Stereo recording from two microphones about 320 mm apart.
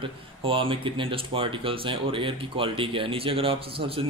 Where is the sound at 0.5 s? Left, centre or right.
Centre.